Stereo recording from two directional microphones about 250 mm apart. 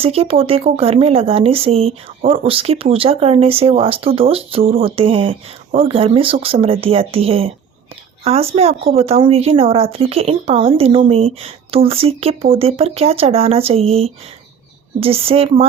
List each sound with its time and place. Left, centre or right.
0.0 s speech: right